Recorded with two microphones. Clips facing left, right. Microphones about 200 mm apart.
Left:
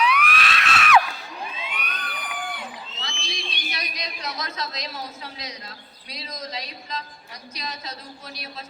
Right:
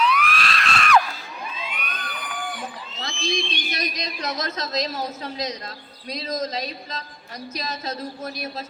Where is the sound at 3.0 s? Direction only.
45° right (ahead or behind).